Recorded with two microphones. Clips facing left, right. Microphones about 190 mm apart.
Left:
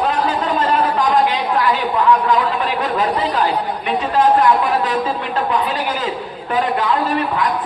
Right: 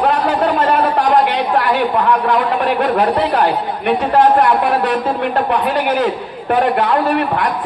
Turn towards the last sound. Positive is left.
turn(degrees=-60)  # may be behind; listen again after turning